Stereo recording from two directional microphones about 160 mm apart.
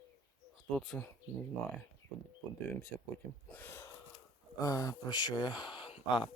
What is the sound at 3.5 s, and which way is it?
Gasp, 10° left (ahead or behind).